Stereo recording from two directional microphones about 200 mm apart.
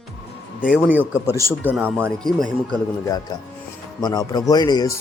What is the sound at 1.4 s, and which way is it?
Speech, 15° left (ahead or behind).